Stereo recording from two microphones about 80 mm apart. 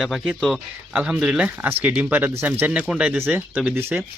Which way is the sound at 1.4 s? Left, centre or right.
Right.